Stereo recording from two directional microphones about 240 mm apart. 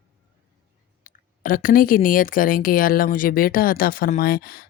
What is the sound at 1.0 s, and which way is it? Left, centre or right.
A woman's voice, left.